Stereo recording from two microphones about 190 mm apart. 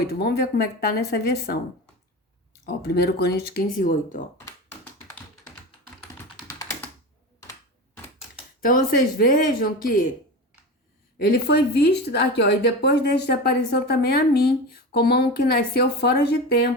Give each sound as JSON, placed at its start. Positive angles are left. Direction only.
{"t": 0.1, "sound": "speech", "side_deg": 60}
{"t": 8.6, "sound": "speech", "side_deg": 45}
{"t": 11.2, "sound": "speech", "side_deg": 55}